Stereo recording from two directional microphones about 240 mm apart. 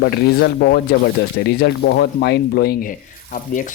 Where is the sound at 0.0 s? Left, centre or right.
Left.